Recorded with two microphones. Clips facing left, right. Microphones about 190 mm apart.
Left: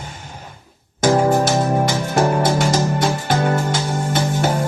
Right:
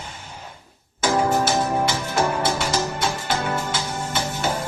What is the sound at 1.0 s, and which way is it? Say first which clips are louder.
Music: left 5 dB; 45° left (ahead or behind).